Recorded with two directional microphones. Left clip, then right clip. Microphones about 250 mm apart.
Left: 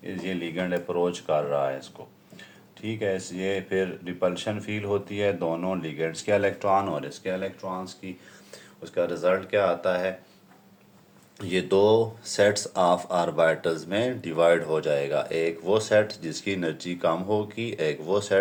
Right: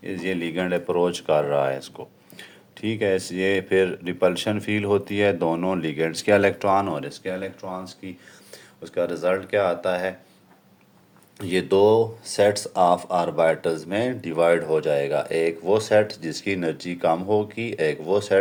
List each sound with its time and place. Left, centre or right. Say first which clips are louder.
0.0 s speech: right 5 dB; right
11.3 s speech: right 3 dB; right